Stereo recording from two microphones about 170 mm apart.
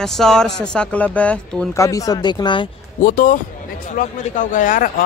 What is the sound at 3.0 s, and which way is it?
Speech, 55° left (ahead or behind).